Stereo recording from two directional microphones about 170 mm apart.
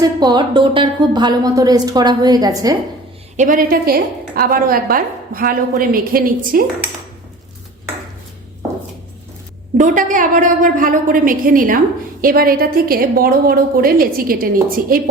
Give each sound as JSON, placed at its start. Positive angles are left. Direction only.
{"t": 0.0, "sound": "a woman's voice", "side_deg": -25}
{"t": 3.3, "sound": "a woman's voice", "side_deg": -50}
{"t": 9.7, "sound": "a woman's voice", "side_deg": -50}